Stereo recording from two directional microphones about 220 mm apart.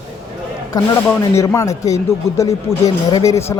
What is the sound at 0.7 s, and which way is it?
Speech, 15° left (ahead or behind).